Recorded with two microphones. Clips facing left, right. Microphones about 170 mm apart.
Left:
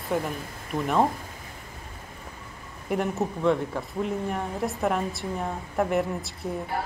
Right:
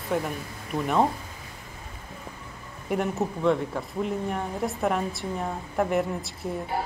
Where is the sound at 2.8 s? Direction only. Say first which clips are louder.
Even; centre (ahead or behind).